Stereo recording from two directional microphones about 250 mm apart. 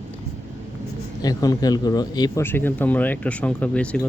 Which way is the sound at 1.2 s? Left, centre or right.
Centre.